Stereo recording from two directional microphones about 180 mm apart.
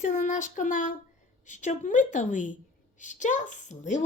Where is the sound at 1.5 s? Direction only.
40° left (ahead or behind).